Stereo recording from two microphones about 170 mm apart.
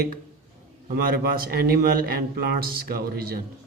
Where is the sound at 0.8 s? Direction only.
60° right (ahead or behind).